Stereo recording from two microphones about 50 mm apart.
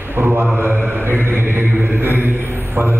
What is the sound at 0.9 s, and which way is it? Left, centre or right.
Chant, right.